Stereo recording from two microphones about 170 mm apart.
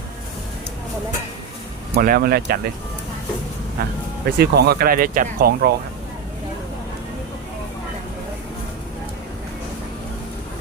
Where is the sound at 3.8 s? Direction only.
60° right (ahead or behind).